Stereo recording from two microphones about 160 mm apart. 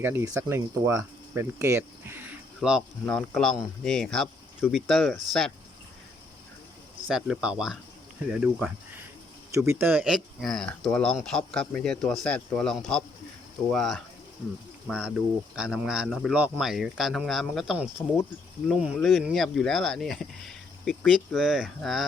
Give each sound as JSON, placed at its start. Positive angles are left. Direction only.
{"t": 0.0, "sound": "speech", "side_deg": -15}
{"t": 2.6, "sound": "speech", "side_deg": 0}
{"t": 7.1, "sound": "speech", "side_deg": -5}
{"t": 9.5, "sound": "speech", "side_deg": -15}
{"t": 18.9, "sound": "speech", "side_deg": 0}